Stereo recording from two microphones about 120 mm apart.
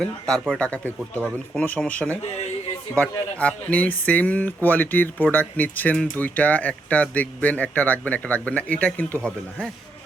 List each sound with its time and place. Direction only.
0.0 s speech: 5° left (ahead or behind)